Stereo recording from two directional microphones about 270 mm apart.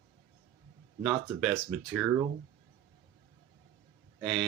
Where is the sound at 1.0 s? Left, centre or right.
Centre.